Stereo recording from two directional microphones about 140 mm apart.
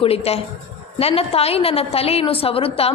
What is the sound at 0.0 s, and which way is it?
A woman's voice, 45° left (ahead or behind).